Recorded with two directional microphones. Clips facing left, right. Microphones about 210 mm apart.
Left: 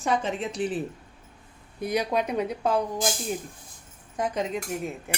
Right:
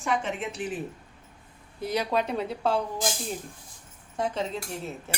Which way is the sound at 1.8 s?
15° left (ahead or behind).